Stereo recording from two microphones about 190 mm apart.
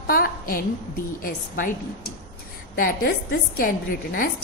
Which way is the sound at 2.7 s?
50° left (ahead or behind).